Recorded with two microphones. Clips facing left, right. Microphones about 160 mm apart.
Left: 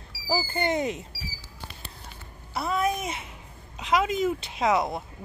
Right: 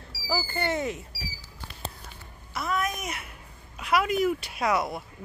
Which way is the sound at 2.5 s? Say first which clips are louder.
Left 3 dB; 30° left (ahead or behind).